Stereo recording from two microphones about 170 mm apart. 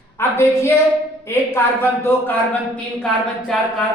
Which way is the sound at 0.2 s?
15° left (ahead or behind).